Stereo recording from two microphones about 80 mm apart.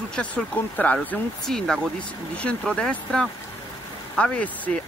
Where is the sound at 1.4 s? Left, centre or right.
Centre.